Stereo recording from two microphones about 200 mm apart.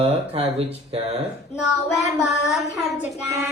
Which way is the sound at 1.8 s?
Centre (ahead or behind).